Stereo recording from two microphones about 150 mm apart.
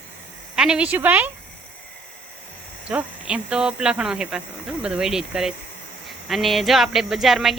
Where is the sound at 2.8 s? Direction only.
10° right (ahead or behind).